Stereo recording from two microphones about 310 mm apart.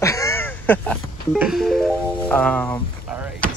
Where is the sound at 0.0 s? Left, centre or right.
Centre.